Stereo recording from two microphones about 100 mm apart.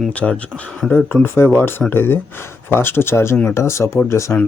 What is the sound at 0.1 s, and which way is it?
Speech, 15° left (ahead or behind).